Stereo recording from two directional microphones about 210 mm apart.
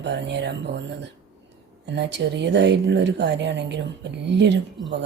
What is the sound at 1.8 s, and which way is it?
Speech, 55° right (ahead or behind).